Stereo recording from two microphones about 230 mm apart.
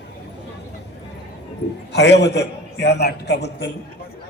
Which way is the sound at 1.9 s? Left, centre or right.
Left.